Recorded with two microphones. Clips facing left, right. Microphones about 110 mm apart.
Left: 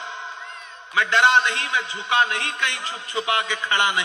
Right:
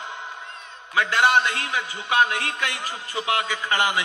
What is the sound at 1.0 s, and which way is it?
A man's voice, 25° left (ahead or behind).